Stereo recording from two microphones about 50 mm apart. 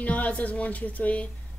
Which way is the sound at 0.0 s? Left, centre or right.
Left.